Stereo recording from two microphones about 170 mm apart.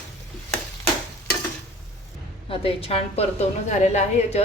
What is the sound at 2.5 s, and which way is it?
A woman's voice, 35° left (ahead or behind).